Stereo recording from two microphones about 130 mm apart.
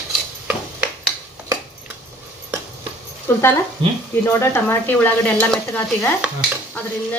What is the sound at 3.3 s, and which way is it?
Speech, 20° left (ahead or behind).